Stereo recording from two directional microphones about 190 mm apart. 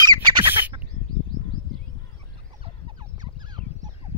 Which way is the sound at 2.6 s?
25° right (ahead or behind).